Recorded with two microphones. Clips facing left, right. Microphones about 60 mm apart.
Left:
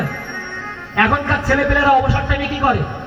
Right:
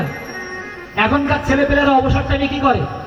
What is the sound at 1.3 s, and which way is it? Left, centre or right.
Speech, left.